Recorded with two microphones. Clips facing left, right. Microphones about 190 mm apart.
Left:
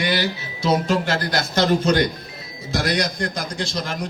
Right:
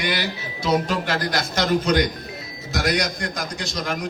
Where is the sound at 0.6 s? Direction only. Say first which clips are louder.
Left 2 dB; 25° left (ahead or behind).